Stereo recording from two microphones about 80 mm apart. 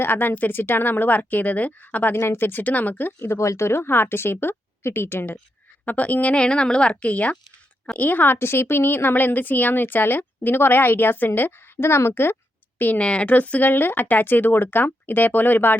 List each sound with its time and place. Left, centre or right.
0.0 s a woman's voice: left
12.8 s a woman's voice: centre